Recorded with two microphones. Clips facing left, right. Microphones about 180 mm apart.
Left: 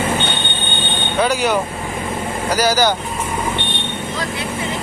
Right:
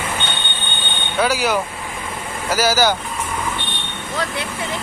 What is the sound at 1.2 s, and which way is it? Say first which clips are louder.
Speech: left 1 dB; 5° right (ahead or behind).